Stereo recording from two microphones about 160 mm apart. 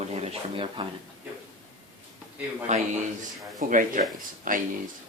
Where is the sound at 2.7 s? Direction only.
45° right (ahead or behind).